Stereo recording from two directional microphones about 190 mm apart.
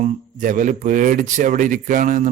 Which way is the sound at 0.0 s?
40° right (ahead or behind).